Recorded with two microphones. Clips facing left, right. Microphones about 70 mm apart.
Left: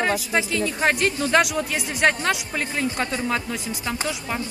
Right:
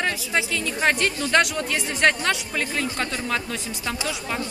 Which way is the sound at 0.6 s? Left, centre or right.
Centre.